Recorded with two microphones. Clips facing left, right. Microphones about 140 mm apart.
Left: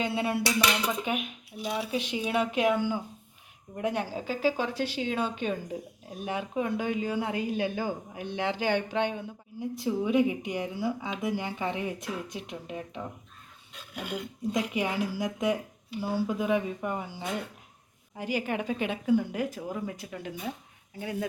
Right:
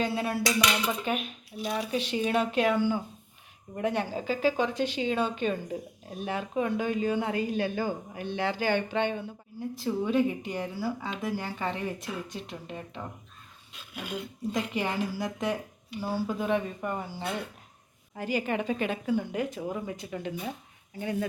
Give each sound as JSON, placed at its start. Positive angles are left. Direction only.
{"t": 0.0, "sound": "a sound", "side_deg": 25}
{"t": 1.0, "sound": "a woman's voice", "side_deg": 15}
{"t": 14.1, "sound": "a woman's voice", "side_deg": 5}